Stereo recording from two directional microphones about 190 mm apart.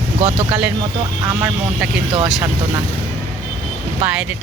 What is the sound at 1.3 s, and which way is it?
Speech, 10° right (ahead or behind).